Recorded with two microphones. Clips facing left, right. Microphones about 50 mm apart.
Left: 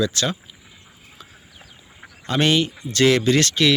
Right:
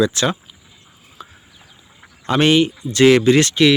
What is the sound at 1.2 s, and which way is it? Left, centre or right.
Clip-clop, centre.